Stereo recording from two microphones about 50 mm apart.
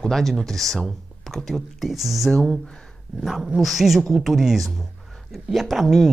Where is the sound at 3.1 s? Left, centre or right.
Centre.